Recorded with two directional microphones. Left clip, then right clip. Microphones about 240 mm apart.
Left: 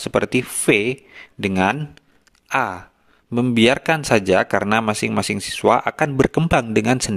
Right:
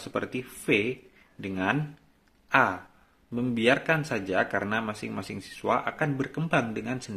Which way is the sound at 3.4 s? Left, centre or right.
Left.